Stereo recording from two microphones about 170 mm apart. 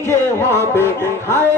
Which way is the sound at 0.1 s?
15° left (ahead or behind).